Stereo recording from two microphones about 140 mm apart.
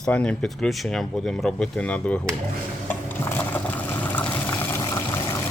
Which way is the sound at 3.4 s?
15° left (ahead or behind).